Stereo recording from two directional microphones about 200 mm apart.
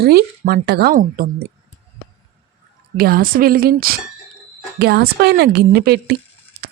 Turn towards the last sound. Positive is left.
turn(degrees=-55)  # may be behind; listen again after turning